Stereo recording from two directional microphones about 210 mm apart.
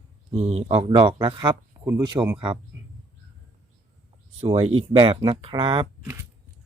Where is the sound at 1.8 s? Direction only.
10° right (ahead or behind).